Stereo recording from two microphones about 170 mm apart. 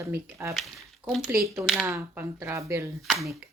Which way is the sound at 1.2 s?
15° right (ahead or behind).